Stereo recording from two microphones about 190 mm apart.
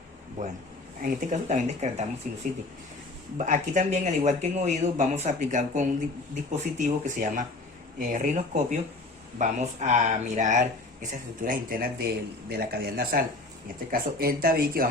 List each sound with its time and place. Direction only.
0.4 s speech: 40° right (ahead or behind)